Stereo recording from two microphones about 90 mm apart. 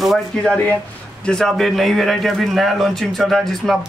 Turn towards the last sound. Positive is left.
turn(degrees=0)  # may be behind; listen again after turning